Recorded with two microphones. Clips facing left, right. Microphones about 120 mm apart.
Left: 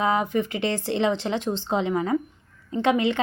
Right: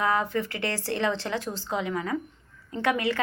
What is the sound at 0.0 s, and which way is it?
A woman's voice, 20° left (ahead or behind).